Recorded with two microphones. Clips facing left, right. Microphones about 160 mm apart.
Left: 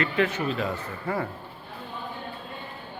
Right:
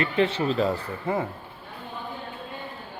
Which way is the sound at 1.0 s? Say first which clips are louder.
Right 2 dB; 20° right (ahead or behind).